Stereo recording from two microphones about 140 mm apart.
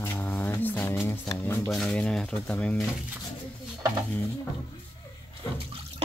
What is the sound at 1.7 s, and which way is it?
Speech, 5° left (ahead or behind).